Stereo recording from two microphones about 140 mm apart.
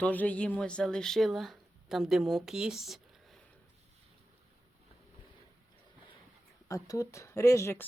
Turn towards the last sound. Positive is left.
turn(degrees=20)  # may be behind; listen again after turning